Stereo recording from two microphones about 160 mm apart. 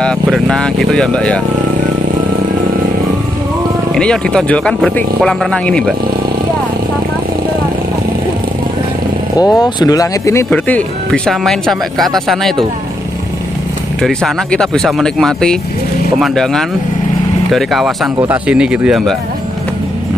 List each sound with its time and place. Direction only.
0.0 s speech: 5° left (ahead or behind)
3.9 s speech: 5° left (ahead or behind)
9.4 s speech: 25° left (ahead or behind)
10.5 s speech: 5° left (ahead or behind)
14.0 s speech: 5° left (ahead or behind)